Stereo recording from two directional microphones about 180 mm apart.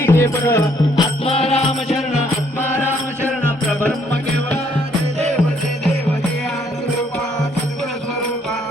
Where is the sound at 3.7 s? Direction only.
10° left (ahead or behind).